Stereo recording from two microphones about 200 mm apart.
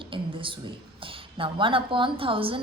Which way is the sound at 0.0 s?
25° right (ahead or behind).